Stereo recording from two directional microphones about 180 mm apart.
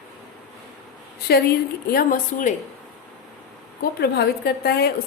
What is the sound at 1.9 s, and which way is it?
Speech, 50° left (ahead or behind).